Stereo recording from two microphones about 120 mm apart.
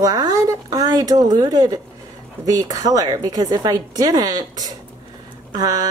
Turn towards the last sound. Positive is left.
turn(degrees=-35)  # may be behind; listen again after turning